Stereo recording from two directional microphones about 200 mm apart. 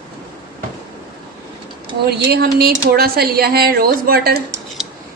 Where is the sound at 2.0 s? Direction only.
50° right (ahead or behind).